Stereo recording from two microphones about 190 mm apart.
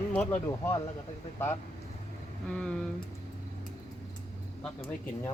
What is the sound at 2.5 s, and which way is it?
Speech, 5° left (ahead or behind).